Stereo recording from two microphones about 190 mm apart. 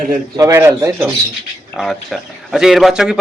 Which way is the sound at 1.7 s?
Centre (ahead or behind).